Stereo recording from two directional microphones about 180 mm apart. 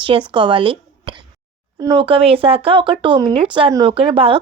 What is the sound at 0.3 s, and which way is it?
Speech, 25° right (ahead or behind).